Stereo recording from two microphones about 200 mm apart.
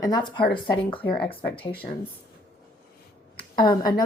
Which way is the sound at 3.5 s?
20° left (ahead or behind).